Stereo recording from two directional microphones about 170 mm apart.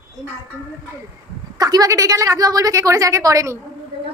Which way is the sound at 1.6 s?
20° right (ahead or behind).